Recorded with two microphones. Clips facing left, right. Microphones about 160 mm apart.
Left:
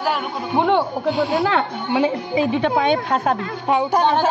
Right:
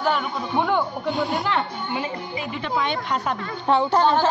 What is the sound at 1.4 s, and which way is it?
A woman's voice, 90° left.